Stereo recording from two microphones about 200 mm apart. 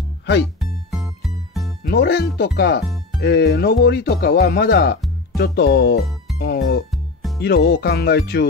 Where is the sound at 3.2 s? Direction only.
55° left (ahead or behind).